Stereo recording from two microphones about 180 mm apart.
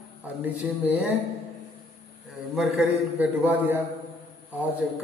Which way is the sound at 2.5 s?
Centre (ahead or behind).